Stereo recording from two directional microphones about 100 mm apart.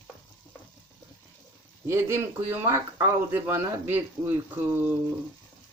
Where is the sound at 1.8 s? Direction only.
25° right (ahead or behind).